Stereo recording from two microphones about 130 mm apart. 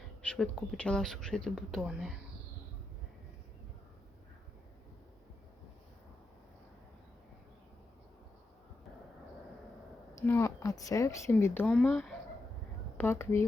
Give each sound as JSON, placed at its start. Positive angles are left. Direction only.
{"t": 0.2, "sound": "speech", "side_deg": 10}
{"t": 10.2, "sound": "a woman's voice", "side_deg": 20}
{"t": 11.6, "sound": "speech", "side_deg": 5}
{"t": 13.0, "sound": "speech", "side_deg": 20}